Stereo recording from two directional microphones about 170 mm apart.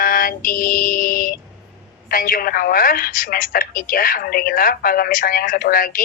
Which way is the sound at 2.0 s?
60° left (ahead or behind).